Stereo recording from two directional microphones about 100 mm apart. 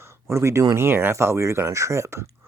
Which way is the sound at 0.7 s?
20° right (ahead or behind).